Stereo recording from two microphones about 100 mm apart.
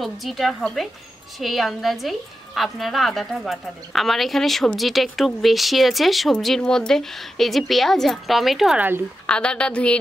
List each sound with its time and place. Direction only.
0.0 s a woman's voice: centre (ahead or behind)
8.7 s speech: 20° right (ahead or behind)
9.2 s a woman's voice: 10° left (ahead or behind)